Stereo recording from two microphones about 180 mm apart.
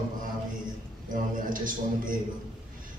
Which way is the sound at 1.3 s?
50° right (ahead or behind).